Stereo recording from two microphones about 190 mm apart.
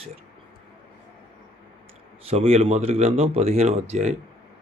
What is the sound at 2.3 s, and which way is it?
Speech, 30° right (ahead or behind).